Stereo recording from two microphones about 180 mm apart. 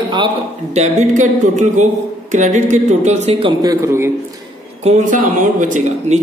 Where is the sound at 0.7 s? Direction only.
40° right (ahead or behind).